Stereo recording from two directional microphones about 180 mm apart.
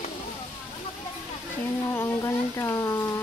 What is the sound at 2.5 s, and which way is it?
Speech, 15° left (ahead or behind).